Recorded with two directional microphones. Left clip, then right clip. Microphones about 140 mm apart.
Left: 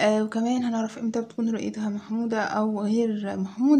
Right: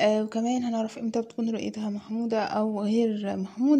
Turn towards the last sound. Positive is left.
turn(degrees=-45)  # may be behind; listen again after turning